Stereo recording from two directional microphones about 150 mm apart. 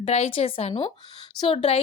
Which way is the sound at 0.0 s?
45° left (ahead or behind).